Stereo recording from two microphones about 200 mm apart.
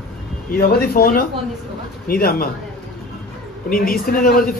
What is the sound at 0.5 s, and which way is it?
A man's voice, 50° left (ahead or behind).